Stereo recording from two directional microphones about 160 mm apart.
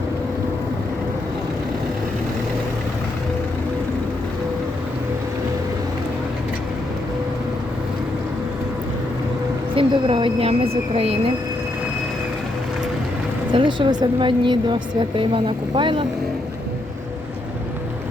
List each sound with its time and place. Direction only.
9.7 s a woman's voice: 30° right (ahead or behind)
13.5 s a woman's voice: 30° right (ahead or behind)